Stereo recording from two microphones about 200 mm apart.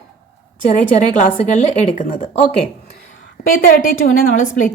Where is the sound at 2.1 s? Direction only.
25° left (ahead or behind).